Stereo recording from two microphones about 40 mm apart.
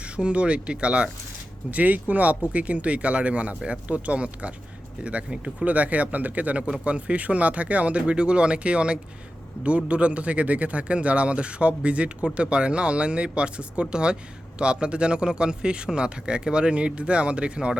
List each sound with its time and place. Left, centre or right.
0.0 s speech: right
1.7 s speech: right
5.6 s speech: right